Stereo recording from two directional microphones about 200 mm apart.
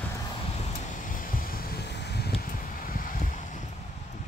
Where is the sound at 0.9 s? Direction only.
40° left (ahead or behind).